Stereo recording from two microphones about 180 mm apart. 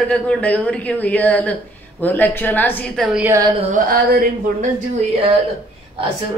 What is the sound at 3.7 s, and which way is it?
Speech, 50° right (ahead or behind).